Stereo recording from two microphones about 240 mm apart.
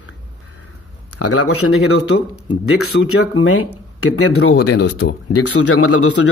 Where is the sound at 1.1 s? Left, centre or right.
Left.